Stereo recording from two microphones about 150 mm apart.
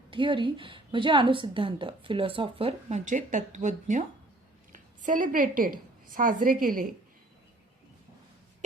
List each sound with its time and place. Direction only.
0.1 s a woman's voice: 35° right (ahead or behind)
3.0 s a woman's voice: 60° right (ahead or behind)